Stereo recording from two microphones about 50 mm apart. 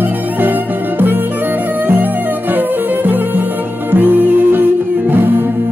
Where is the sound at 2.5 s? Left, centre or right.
Right.